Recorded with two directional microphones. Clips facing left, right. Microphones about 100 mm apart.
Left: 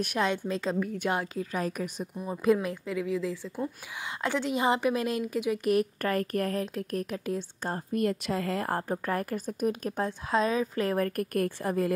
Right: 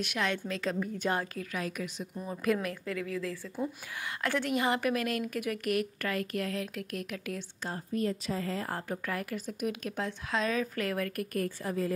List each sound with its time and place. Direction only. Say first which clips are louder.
0.2 s a woman's voice: left 4 dB; 30° left (ahead or behind)
0.9 s a woman's voice: left 2 dB; 15° left (ahead or behind)
1.5 s a woman's voice: left 4 dB; 40° left (ahead or behind)
2.1 s a woman's voice: left 5 dB; 20° left (ahead or behind)
6.0 s speech: left 5 dB; 45° left (ahead or behind)
6.6 s a woman's voice: left 5 dB; 35° left (ahead or behind)
7.6 s a woman's voice: left 3 dB; 55° left (ahead or behind)
8.8 s a woman's voice: left 5 dB; 35° left (ahead or behind)
11.3 s a woman's voice: left 4 dB; 55° left (ahead or behind)